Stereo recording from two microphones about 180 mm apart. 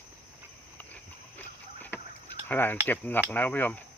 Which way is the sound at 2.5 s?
10° left (ahead or behind).